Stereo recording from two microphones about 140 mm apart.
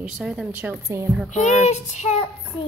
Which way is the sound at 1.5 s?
55° left (ahead or behind).